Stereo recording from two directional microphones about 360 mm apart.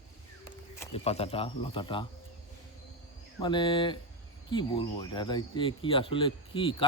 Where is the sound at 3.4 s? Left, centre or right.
Centre.